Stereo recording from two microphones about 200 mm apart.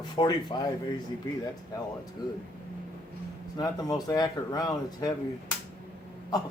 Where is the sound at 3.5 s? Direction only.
20° left (ahead or behind).